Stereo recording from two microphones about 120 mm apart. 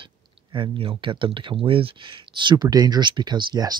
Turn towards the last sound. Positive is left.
turn(degrees=-40)  # may be behind; listen again after turning